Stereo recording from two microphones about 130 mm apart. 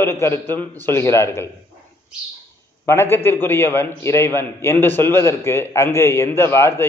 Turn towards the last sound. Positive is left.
turn(degrees=20)  # may be behind; listen again after turning